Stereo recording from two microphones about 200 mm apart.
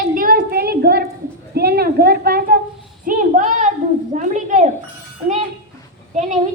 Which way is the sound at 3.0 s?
40° right (ahead or behind).